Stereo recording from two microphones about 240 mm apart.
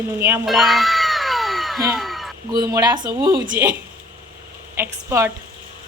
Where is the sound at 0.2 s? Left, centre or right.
Centre.